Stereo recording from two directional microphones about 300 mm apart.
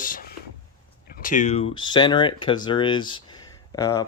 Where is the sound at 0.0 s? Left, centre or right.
Left.